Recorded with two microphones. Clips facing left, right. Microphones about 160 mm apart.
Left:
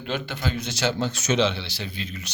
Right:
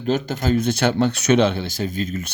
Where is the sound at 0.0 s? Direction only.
40° right (ahead or behind).